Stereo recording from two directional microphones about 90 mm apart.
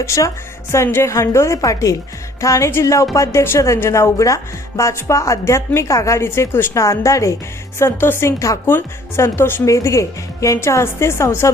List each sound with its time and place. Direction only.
0.0 s a woman's voice: 35° left (ahead or behind)